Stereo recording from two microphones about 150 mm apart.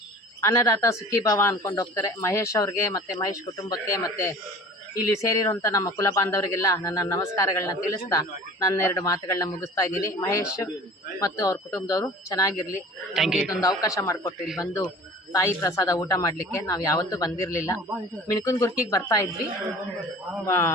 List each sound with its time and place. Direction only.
0.4 s speech: 20° left (ahead or behind)
12.7 s a man's voice: 5° right (ahead or behind)
13.6 s speech: 20° left (ahead or behind)
20.5 s speech: 20° left (ahead or behind)